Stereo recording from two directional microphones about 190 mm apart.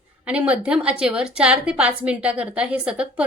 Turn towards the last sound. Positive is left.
turn(degrees=-5)  # may be behind; listen again after turning